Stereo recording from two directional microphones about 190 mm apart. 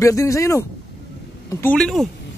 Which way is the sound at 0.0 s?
15° left (ahead or behind).